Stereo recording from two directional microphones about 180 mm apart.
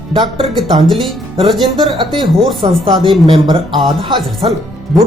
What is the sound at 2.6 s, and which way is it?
Speech, 25° right (ahead or behind).